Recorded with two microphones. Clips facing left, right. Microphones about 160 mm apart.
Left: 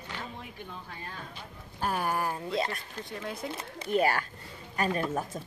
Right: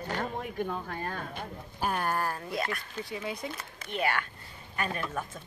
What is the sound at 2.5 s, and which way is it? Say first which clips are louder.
Speech: left 2 dB; 25° left (ahead or behind).